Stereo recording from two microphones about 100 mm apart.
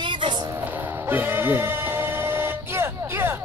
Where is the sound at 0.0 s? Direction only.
55° right (ahead or behind).